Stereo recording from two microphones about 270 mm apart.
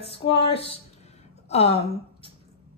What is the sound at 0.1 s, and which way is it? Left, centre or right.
A woman's voice, left.